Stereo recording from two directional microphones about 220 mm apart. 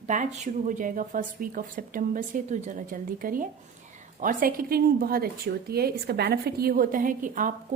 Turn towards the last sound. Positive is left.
turn(degrees=-40)  # may be behind; listen again after turning